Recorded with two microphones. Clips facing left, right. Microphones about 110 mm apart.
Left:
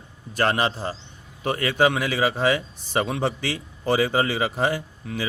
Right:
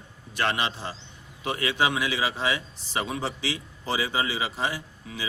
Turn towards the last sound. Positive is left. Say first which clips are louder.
# left 6 dB
turn(degrees=55)  # may be behind; listen again after turning